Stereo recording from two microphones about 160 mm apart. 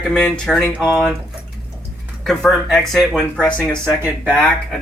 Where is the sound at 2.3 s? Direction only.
Centre (ahead or behind).